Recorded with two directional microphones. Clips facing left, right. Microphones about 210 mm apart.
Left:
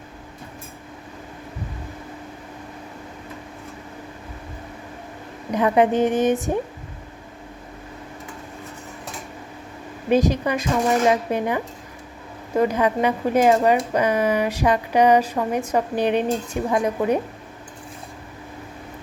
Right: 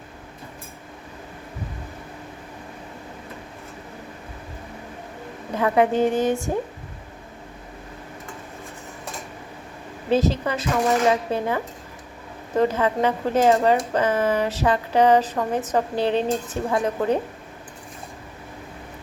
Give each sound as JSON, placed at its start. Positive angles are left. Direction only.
{"t": 5.5, "sound": "speech", "side_deg": 20}
{"t": 10.1, "sound": "speech", "side_deg": 15}